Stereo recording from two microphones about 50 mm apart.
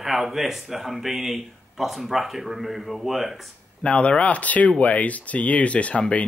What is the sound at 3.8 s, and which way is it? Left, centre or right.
Speech, left.